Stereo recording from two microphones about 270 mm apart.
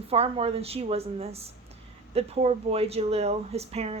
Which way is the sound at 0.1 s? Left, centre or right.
Right.